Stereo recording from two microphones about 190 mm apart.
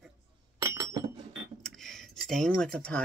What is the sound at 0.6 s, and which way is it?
Chink, 15° right (ahead or behind).